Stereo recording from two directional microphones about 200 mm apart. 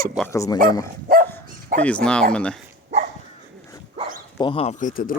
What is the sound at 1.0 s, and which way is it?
Dog, 50° right (ahead or behind).